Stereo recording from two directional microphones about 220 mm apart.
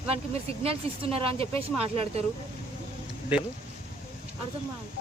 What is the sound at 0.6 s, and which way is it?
Speech, 25° right (ahead or behind).